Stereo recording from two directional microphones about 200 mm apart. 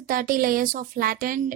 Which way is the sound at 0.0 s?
45° right (ahead or behind).